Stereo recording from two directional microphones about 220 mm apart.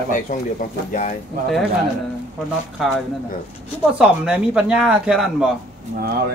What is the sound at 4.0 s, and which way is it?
Speech, 5° right (ahead or behind).